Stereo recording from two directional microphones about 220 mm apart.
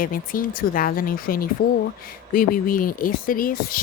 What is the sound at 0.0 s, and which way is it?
Speech, 40° left (ahead or behind).